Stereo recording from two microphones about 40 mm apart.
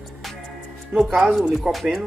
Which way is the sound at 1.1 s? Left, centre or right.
Centre.